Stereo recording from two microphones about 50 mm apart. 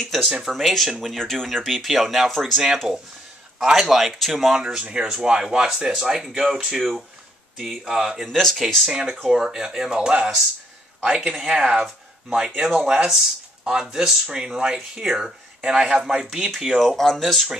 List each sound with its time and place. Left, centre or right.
0.5 s speech: centre
4.6 s speech: centre
8.4 s speech: centre
8.8 s speech: centre
11.3 s speech: centre
15.0 s speech: centre
16.8 s speech: centre